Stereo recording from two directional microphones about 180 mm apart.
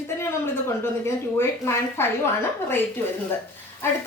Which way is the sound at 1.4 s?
15° left (ahead or behind).